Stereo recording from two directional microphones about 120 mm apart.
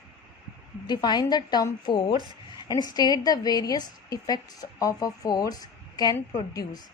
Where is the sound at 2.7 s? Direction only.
35° left (ahead or behind).